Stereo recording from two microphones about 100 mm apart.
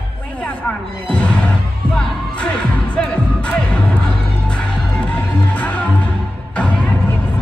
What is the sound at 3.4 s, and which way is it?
Music, 10° left (ahead or behind).